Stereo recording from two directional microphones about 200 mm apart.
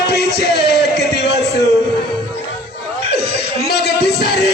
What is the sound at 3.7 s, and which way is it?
Music, 55° left (ahead or behind).